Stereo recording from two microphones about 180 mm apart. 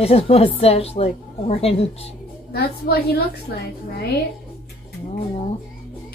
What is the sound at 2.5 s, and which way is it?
Speech, 60° left (ahead or behind).